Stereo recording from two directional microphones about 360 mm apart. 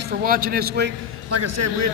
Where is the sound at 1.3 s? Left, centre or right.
Right.